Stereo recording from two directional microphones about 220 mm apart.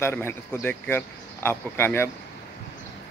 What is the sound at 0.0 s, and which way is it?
Speech, 10° left (ahead or behind).